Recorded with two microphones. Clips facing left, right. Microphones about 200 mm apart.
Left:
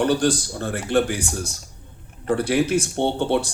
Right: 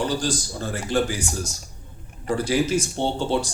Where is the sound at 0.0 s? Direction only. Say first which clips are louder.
Left 5 dB; 60° left (ahead or behind).